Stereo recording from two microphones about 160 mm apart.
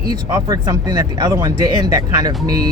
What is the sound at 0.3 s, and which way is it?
Speech, 20° right (ahead or behind).